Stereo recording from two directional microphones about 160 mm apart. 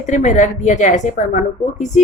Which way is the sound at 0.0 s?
50° left (ahead or behind).